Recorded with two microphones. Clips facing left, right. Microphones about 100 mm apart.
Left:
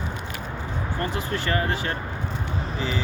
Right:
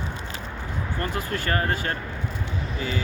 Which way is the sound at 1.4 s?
40° right (ahead or behind).